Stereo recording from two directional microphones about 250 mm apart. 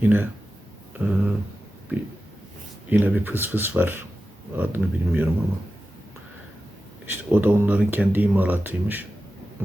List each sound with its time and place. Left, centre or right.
0.0 s speech: centre
0.9 s a sound: centre
2.9 s speech: centre
7.0 s speech: centre